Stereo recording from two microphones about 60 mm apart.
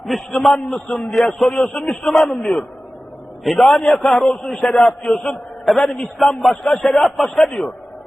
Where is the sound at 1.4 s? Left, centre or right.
Centre.